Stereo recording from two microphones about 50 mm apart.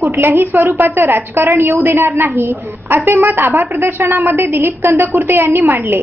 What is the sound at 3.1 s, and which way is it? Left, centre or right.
A woman's voice, right.